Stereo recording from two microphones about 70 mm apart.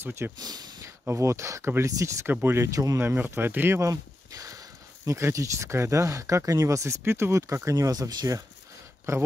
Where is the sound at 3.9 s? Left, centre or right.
Right.